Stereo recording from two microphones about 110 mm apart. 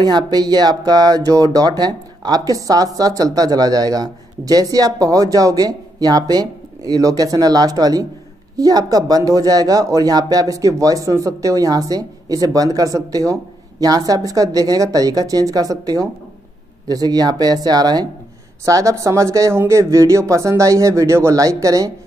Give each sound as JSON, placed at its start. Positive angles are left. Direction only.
{"t": 0.1, "sound": "speech", "side_deg": -40}